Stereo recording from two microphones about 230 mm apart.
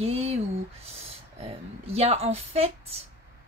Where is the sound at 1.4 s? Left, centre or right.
Right.